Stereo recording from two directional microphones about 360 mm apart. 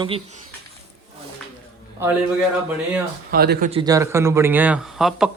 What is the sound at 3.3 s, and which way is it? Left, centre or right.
A man's voice, right.